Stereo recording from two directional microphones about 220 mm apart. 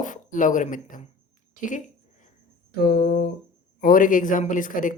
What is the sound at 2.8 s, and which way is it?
A woman's voice, 45° left (ahead or behind).